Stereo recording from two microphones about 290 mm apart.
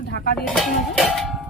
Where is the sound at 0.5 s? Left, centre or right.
Centre.